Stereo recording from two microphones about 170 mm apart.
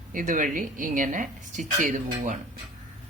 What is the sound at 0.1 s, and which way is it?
Speech, 50° right (ahead or behind).